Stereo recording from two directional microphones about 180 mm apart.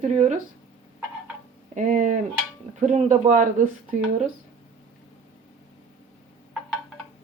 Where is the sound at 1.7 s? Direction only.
45° right (ahead or behind).